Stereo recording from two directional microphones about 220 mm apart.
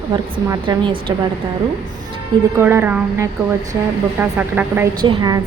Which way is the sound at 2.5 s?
10° right (ahead or behind).